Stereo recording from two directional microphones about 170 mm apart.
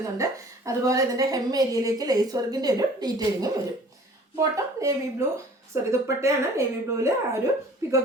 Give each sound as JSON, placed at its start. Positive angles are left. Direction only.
{"t": 0.0, "sound": "a woman's voice", "side_deg": -20}